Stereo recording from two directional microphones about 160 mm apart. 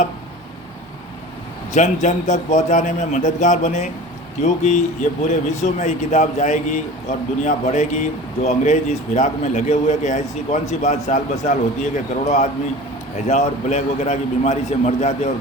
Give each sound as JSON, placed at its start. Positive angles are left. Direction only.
{"t": 1.7, "sound": "a man's voice", "side_deg": 50}